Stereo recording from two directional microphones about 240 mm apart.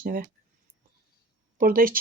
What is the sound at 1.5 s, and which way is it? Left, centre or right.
Speech, right.